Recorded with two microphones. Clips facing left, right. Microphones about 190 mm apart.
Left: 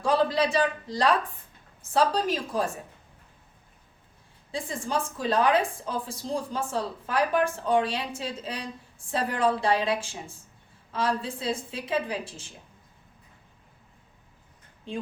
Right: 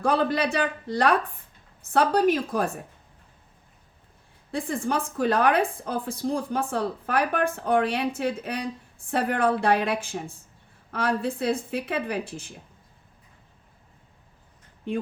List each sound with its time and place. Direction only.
0.0 s a woman's voice: 60° right (ahead or behind)
4.5 s a woman's voice: 60° right (ahead or behind)